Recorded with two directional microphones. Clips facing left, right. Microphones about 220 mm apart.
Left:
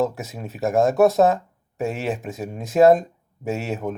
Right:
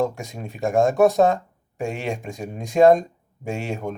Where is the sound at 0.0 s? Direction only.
5° left (ahead or behind).